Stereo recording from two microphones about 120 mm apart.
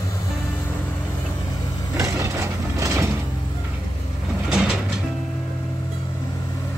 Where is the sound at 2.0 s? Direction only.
25° right (ahead or behind).